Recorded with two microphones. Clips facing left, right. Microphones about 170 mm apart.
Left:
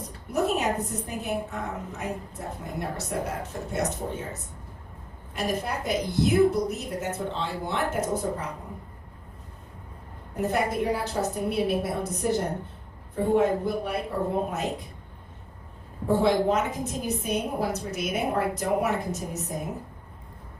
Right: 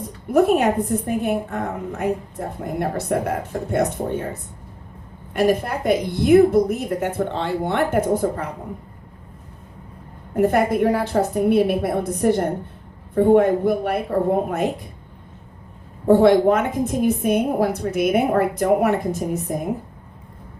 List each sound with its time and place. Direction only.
0.3 s a woman's voice: 55° right (ahead or behind)
10.3 s a woman's voice: 60° right (ahead or behind)
16.0 s a woman's voice: 60° right (ahead or behind)